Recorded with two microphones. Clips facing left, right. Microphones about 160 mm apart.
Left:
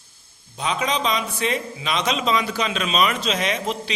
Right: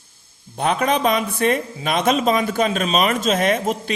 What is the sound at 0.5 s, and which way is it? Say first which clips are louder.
A man's voice: right 5 dB; 55° right (ahead or behind).